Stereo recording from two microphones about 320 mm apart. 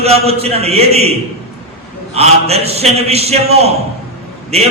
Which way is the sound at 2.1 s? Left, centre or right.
Centre.